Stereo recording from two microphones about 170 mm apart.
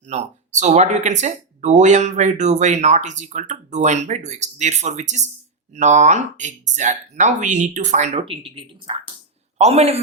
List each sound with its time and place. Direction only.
0.1 s a man's voice: 40° right (ahead or behind)